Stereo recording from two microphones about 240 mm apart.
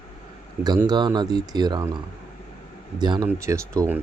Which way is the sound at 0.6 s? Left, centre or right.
Centre.